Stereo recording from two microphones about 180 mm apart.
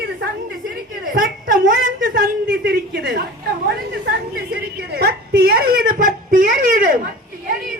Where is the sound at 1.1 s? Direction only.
50° right (ahead or behind).